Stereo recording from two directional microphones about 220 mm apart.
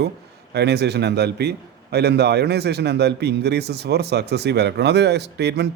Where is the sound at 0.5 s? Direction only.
50° right (ahead or behind).